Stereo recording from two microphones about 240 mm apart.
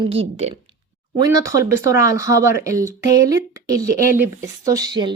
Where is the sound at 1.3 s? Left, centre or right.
Centre.